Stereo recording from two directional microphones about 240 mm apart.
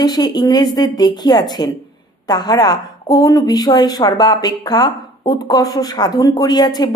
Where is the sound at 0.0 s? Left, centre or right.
Centre.